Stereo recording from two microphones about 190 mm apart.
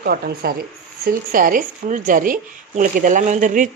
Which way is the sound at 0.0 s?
50° right (ahead or behind).